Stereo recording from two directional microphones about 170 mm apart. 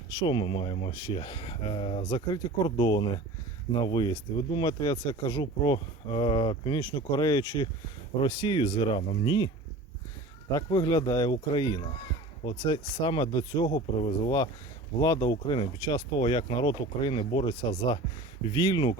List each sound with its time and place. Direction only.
0.2 s speech: 30° left (ahead or behind)
10.5 s speech: 25° left (ahead or behind)
14.3 s speech: 25° left (ahead or behind)